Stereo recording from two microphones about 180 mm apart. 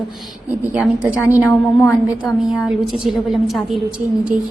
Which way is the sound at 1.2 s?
15° left (ahead or behind).